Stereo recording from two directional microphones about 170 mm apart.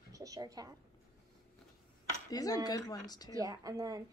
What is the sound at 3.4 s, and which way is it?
Speech, 20° right (ahead or behind).